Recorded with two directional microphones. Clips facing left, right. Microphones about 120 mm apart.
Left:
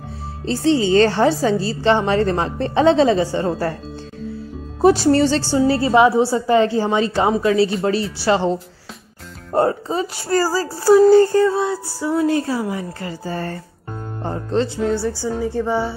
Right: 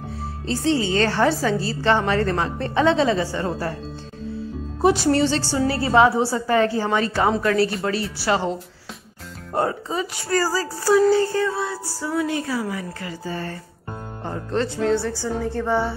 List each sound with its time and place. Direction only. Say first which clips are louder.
0.5 s a woman's voice: left 5 dB; 30° left (ahead or behind)
4.8 s speech: left 4 dB; 35° left (ahead or behind)
5.5 s a woman's voice: left 4 dB; 25° left (ahead or behind)
7.8 s a woman's voice: left 5 dB; 30° left (ahead or behind)
9.5 s speech: left 5 dB; 35° left (ahead or behind)
11.5 s a woman's voice: left 6 dB; 20° left (ahead or behind)
12.2 s speech: left 5 dB; 35° left (ahead or behind)
14.8 s speech: left 1 dB; 5° left (ahead or behind)